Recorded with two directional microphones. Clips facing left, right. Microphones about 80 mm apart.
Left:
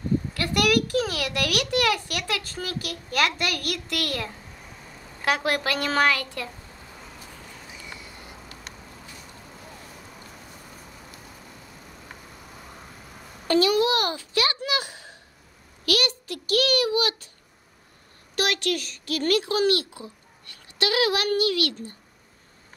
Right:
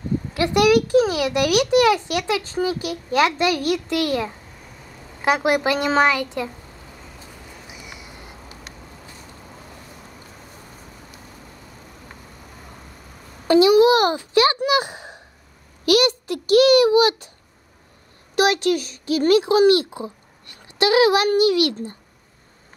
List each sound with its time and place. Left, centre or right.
0.3 s a child's voice: centre
7.6 s a sound: centre
13.5 s a child's voice: centre
18.3 s a child's voice: centre